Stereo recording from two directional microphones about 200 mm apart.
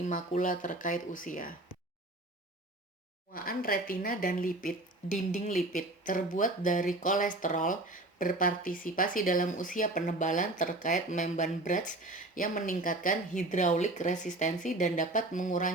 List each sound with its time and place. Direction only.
0.0 s speech: 40° left (ahead or behind)
3.3 s speech: 45° left (ahead or behind)